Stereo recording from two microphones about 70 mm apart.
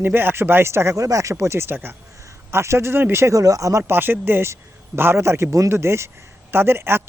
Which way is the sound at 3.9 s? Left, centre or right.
Right.